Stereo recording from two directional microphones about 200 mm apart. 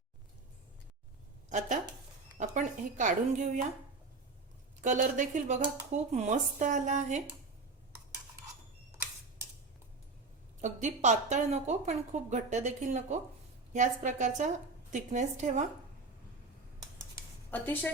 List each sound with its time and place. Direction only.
2.4 s a woman's voice: 40° right (ahead or behind)
4.8 s a woman's voice: 40° right (ahead or behind)
10.6 s a woman's voice: 35° right (ahead or behind)
17.5 s a woman's voice: 10° left (ahead or behind)